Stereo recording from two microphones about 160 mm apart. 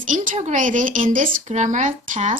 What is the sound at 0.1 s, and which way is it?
Speech, 50° right (ahead or behind).